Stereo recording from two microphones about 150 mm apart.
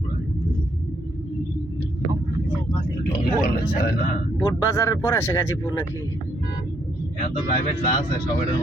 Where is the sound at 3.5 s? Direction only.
90° left.